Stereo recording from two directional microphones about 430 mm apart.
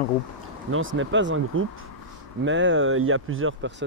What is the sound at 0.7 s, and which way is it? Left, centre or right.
Speech, right.